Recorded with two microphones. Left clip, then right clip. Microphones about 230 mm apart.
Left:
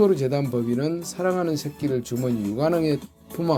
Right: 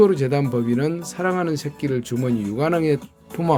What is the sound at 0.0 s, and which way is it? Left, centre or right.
Speech, right.